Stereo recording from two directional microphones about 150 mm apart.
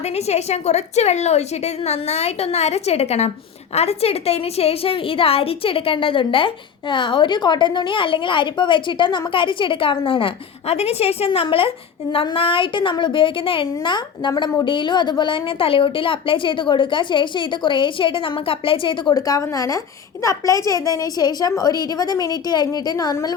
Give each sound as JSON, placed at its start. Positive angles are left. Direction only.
{"t": 0.0, "sound": "a woman's voice", "side_deg": 45}